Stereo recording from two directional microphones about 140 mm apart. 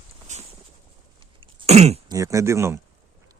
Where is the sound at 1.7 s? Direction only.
50° right (ahead or behind).